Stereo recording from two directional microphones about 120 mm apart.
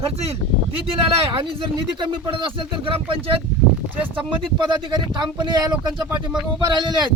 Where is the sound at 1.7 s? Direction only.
45° right (ahead or behind).